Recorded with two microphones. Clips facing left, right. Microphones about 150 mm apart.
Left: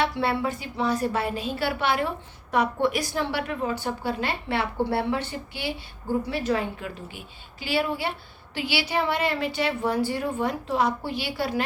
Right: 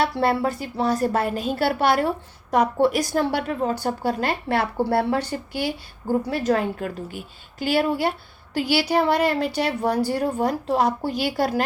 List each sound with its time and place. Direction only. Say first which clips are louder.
0.0 s a woman's voice: right 4 dB; 40° right (ahead or behind)